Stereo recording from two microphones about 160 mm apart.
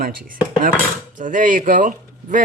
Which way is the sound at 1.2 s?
55° right (ahead or behind).